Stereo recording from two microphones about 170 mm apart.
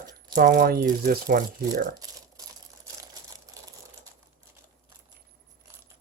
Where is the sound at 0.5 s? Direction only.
60° right (ahead or behind).